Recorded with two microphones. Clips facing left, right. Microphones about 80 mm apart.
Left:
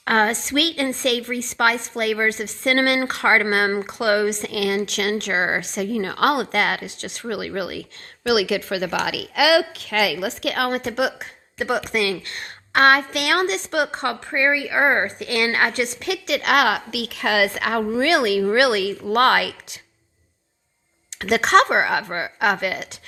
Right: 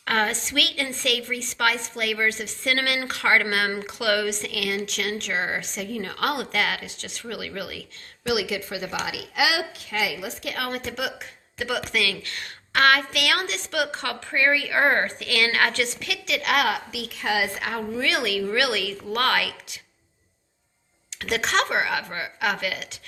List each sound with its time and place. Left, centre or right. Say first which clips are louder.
0.0 s a woman's voice: left 5 dB; left
8.3 s a woman's voice: left 6 dB; left
14.3 s a woman's voice: left 1 dB; left
15.3 s a woman's voice: left 2 dB; left
16.0 s a woman's voice: left 5 dB; left
21.2 s a woman's voice: left 8 dB; left